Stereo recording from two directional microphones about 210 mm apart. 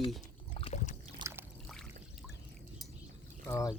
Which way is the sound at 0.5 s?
30° left (ahead or behind).